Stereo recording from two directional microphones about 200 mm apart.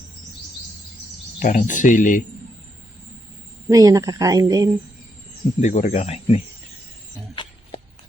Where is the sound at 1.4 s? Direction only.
40° left (ahead or behind).